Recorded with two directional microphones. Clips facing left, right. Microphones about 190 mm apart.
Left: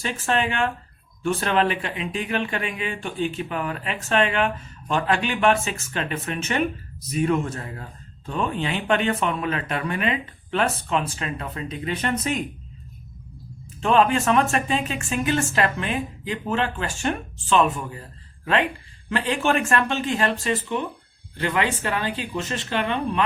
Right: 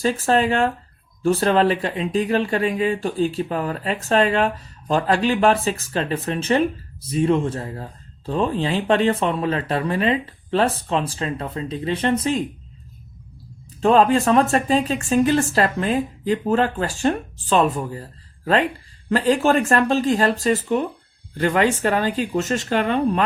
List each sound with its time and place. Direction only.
0.0 s speech: 35° right (ahead or behind)
13.8 s speech: 35° right (ahead or behind)
19.1 s speech: 35° right (ahead or behind)